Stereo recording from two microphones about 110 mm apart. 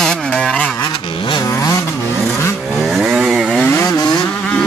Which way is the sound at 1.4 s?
30° left (ahead or behind).